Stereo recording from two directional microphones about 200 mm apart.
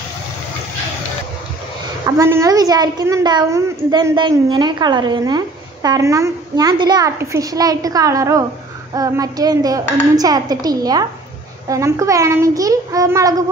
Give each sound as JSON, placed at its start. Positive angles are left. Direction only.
{"t": 2.0, "sound": "a woman's voice", "side_deg": -15}